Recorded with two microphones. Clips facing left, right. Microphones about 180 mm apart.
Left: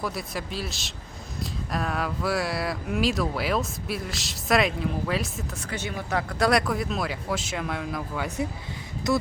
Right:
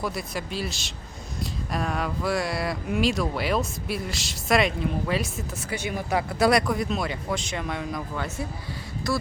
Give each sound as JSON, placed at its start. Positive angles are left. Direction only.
{"t": 0.0, "sound": "speech", "side_deg": 0}
{"t": 5.7, "sound": "speech", "side_deg": -10}
{"t": 6.5, "sound": "speech", "side_deg": 0}
{"t": 9.1, "sound": "speech", "side_deg": 20}